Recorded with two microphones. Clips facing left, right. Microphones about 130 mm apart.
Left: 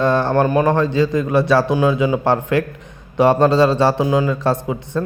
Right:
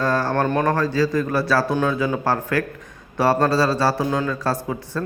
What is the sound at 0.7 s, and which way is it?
A man's voice, 25° left (ahead or behind).